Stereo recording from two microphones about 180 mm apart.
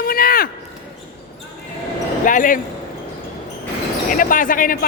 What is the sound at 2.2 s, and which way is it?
Speech, 45° left (ahead or behind).